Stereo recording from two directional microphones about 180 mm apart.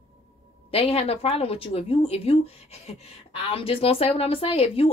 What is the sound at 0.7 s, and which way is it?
Speech, 35° left (ahead or behind).